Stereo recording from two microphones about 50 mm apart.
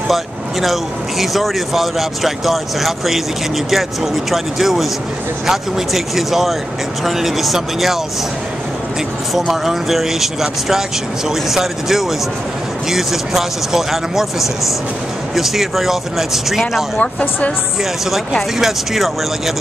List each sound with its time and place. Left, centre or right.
0.1 s speech: centre
9.3 s speech: centre
15.3 s speech: centre
17.0 s speech: left
18.6 s speech: centre